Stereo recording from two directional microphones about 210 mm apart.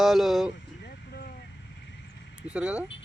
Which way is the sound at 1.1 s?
50° left (ahead or behind).